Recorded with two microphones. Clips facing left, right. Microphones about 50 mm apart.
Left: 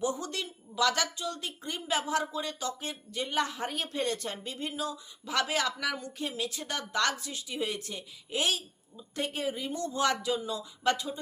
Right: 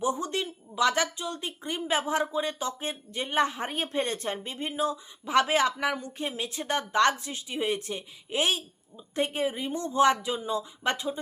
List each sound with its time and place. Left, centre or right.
0.0 s speech: right